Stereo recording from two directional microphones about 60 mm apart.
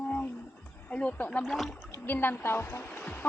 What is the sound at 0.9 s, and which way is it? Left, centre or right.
Speech, left.